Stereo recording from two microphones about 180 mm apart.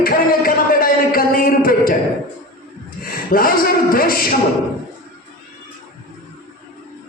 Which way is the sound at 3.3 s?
55° left (ahead or behind).